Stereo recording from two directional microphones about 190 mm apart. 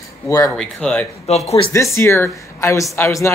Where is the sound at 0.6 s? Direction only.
5° left (ahead or behind).